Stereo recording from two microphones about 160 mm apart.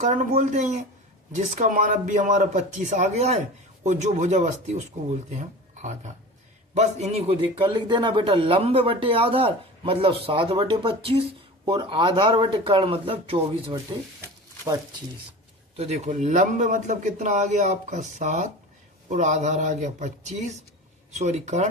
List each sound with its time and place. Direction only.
0.0 s a man's voice: 50° right (ahead or behind); by 13.7 s 35° right (ahead or behind)
14.2 s a sound: 20° right (ahead or behind)
15.8 s a man's voice: 40° right (ahead or behind)